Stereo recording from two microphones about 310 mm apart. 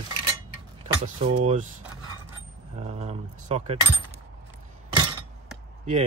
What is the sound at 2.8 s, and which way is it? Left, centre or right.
Speech, right.